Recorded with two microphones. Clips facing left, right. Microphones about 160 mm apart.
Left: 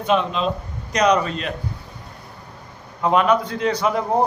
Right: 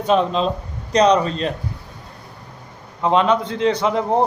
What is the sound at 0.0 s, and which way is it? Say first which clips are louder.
A man's voice: right 3 dB; 35° right (ahead or behind).